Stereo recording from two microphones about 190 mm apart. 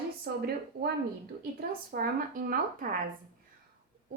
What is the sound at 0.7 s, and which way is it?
A woman's voice, 55° right (ahead or behind).